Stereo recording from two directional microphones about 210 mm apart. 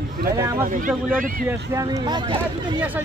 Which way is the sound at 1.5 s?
15° right (ahead or behind).